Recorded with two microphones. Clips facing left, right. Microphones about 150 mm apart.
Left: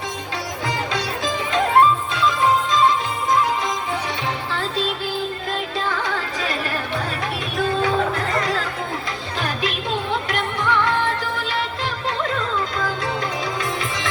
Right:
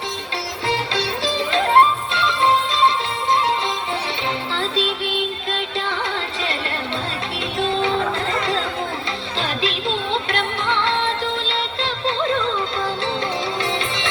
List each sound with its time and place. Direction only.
0.7 s music: 30° right (ahead or behind)
4.5 s music: 25° right (ahead or behind)
7.6 s music: 25° right (ahead or behind)
13.6 s music: 25° right (ahead or behind)